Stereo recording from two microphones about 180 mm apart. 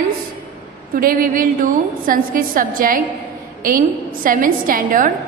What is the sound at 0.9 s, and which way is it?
A woman's voice, 55° right (ahead or behind).